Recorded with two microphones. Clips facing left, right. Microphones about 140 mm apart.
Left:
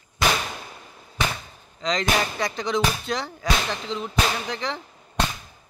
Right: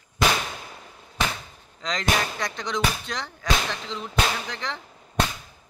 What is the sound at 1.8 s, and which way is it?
Speech, centre (ahead or behind).